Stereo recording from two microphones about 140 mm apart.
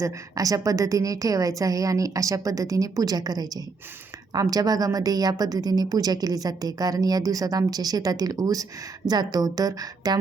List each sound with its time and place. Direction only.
0.0 s a woman's voice: 25° right (ahead or behind)